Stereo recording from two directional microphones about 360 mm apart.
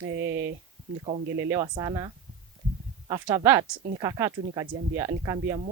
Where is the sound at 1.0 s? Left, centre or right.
Centre.